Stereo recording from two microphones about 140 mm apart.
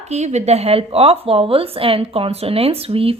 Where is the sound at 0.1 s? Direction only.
55° right (ahead or behind).